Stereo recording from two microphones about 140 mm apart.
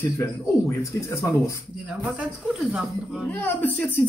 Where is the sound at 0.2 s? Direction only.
20° left (ahead or behind).